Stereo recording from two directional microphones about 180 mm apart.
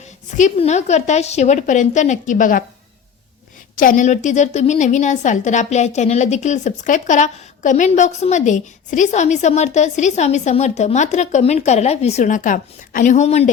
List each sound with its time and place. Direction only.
0.3 s a woman's voice: 40° left (ahead or behind)
3.8 s a woman's voice: 45° left (ahead or behind)